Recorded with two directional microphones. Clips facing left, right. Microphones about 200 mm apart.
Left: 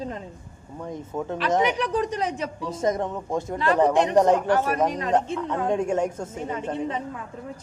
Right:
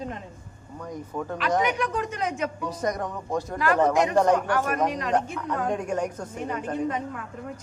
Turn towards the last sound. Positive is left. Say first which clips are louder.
# even
turn(degrees=25)  # may be behind; listen again after turning